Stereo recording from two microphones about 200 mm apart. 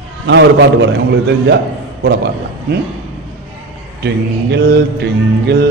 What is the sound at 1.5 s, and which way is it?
Speech, 60° right (ahead or behind).